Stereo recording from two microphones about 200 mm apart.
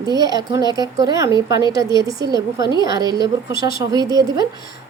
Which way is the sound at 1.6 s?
20° left (ahead or behind).